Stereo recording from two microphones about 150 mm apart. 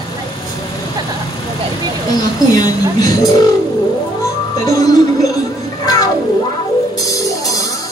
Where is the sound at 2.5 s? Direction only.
25° left (ahead or behind).